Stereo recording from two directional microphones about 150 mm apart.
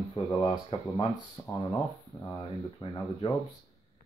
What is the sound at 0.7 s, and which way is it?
Speech, 35° left (ahead or behind).